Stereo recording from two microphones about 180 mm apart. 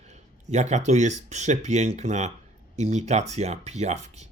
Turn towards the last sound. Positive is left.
turn(degrees=-40)  # may be behind; listen again after turning